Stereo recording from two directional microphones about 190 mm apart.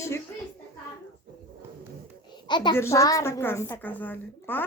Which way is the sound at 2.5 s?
25° left (ahead or behind).